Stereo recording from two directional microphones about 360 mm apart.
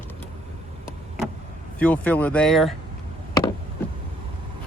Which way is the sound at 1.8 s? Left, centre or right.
Centre.